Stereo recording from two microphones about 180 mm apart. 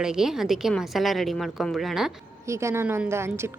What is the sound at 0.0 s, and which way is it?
A woman's voice, 5° right (ahead or behind).